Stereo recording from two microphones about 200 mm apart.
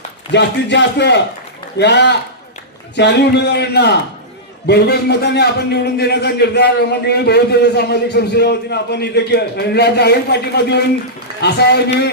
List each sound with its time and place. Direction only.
0.3 s a man's voice: 60° left (ahead or behind)